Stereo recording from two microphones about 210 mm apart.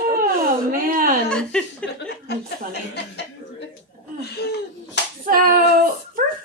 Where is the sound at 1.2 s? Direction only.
5° left (ahead or behind).